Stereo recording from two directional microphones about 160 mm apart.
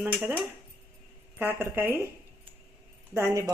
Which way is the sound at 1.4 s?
10° right (ahead or behind).